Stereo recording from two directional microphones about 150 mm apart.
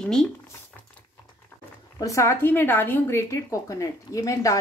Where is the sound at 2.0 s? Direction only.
20° left (ahead or behind).